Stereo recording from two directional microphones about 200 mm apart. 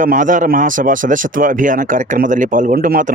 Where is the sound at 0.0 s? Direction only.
40° right (ahead or behind).